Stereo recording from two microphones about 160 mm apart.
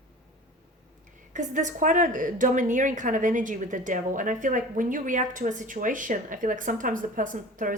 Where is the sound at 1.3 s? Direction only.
50° right (ahead or behind).